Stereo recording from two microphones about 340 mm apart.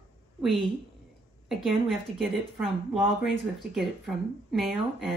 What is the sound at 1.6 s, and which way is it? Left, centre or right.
Speech, centre.